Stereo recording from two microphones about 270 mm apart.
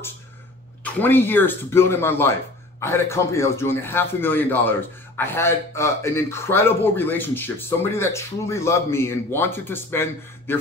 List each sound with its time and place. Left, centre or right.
0.8 s a man's voice: centre